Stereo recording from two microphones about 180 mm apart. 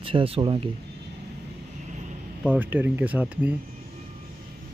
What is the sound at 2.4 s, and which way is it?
Speech, 10° right (ahead or behind).